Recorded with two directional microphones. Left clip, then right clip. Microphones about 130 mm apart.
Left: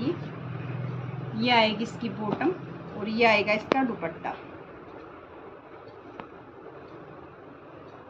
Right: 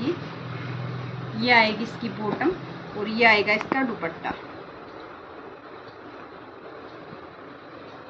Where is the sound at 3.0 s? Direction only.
55° left (ahead or behind).